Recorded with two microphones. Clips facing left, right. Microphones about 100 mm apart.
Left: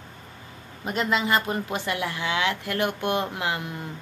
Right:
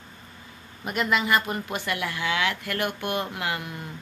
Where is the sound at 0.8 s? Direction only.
25° left (ahead or behind).